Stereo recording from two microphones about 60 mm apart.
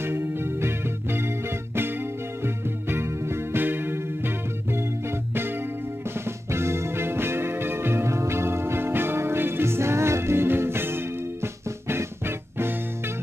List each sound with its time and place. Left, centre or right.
0.0 s music: right
2.4 s music: right
6.2 s music: right